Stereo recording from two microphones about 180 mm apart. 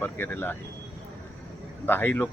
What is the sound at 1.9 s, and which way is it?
Speech, 10° left (ahead or behind).